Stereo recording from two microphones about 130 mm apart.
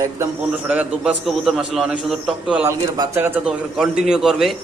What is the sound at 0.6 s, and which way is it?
A man's voice, 10° right (ahead or behind).